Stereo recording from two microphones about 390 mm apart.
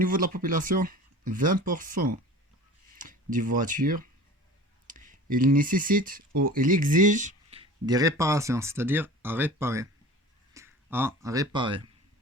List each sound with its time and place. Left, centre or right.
0.0 s speech: right